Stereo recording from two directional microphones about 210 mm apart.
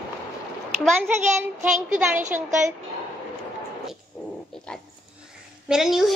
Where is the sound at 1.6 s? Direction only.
35° right (ahead or behind).